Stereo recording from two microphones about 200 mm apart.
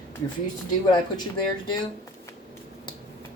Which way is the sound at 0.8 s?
20° left (ahead or behind).